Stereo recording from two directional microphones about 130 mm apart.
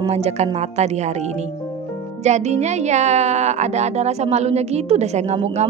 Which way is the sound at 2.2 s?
60° right (ahead or behind).